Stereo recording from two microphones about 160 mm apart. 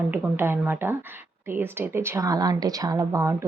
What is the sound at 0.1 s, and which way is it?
A woman's voice, 15° right (ahead or behind).